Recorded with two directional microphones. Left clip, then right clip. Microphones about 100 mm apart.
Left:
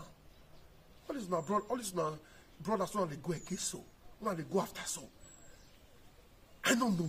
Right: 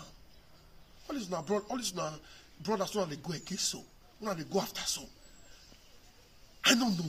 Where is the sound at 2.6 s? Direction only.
45° left (ahead or behind).